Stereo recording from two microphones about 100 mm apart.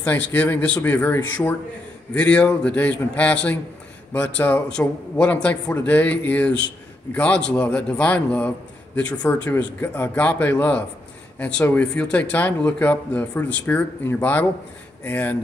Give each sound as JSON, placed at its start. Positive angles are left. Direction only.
{"t": 0.0, "sound": "speech", "side_deg": 15}